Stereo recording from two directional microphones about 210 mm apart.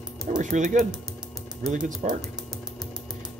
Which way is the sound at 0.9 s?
Centre (ahead or behind).